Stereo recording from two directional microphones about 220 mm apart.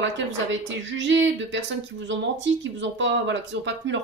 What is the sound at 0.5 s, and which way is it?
Speech, 55° right (ahead or behind).